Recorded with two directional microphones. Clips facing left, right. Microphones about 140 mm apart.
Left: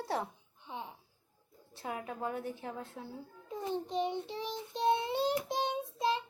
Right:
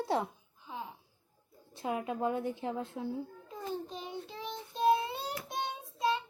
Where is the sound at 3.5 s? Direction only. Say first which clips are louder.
Left 6 dB; 20° left (ahead or behind).